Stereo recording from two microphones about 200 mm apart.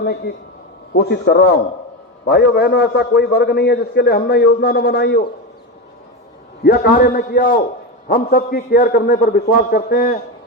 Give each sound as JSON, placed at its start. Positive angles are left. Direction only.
{"t": 0.0, "sound": "a sound", "side_deg": 50}
{"t": 0.9, "sound": "a man's voice", "side_deg": 55}
{"t": 6.6, "sound": "a man's voice", "side_deg": 50}